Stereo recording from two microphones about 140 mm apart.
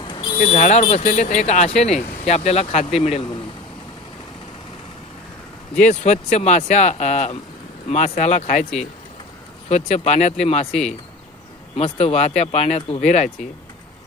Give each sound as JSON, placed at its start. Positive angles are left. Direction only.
{"t": 0.1, "sound": "speech", "side_deg": 35}
{"t": 5.8, "sound": "speech", "side_deg": 55}
{"t": 9.6, "sound": "speech", "side_deg": 50}
{"t": 11.8, "sound": "speech", "side_deg": 45}